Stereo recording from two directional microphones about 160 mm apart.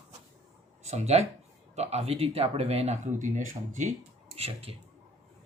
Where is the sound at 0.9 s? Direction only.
45° right (ahead or behind).